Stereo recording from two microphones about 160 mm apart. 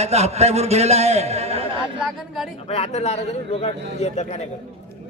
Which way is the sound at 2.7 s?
40° left (ahead or behind).